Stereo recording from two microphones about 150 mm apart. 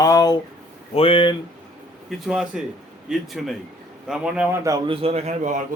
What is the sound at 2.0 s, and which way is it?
A man's voice, 5° right (ahead or behind).